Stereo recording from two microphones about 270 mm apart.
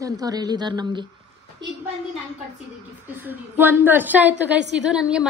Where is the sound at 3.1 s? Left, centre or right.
Centre.